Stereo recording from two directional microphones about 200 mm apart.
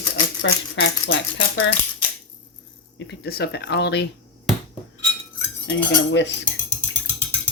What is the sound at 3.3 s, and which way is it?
Speech, 55° left (ahead or behind).